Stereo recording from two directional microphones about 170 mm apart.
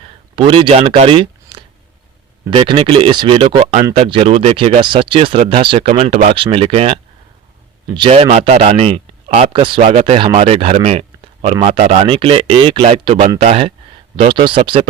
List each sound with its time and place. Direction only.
0.3 s speech: 30° right (ahead or behind)
8.3 s speech: 40° right (ahead or behind)